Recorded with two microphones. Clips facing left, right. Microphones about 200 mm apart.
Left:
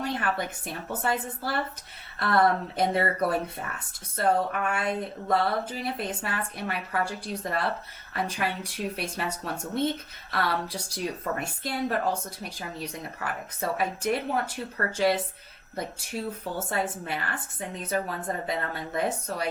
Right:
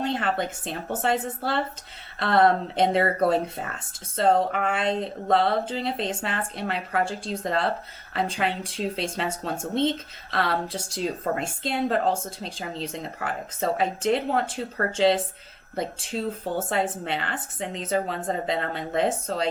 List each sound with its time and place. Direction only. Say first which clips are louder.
0.0 s speech: right 3 dB; 25° right (ahead or behind)